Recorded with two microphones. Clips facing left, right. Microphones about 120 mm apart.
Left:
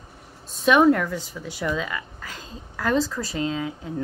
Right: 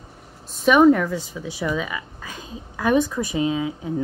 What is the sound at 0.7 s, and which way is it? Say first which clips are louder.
A woman's voice: right 3 dB; 5° right (ahead or behind).